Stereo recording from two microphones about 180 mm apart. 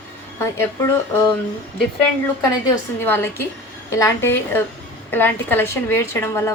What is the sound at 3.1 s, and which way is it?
A woman's voice, 10° left (ahead or behind).